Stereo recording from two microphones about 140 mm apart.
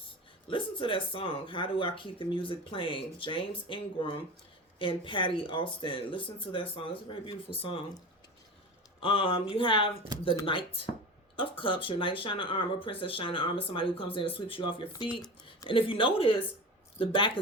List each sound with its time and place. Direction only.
0.5 s speech: 35° left (ahead or behind)
9.0 s speech: 40° left (ahead or behind)